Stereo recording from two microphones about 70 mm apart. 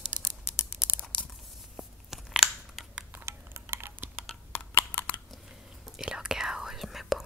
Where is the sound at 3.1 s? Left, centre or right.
Right.